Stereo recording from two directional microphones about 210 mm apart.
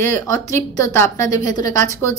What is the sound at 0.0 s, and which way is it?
Speech, 15° left (ahead or behind).